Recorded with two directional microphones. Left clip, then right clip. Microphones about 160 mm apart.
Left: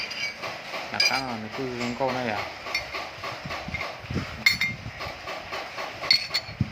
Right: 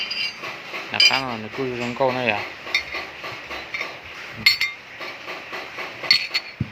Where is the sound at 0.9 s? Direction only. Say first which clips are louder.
Right 8 dB; 20° right (ahead or behind).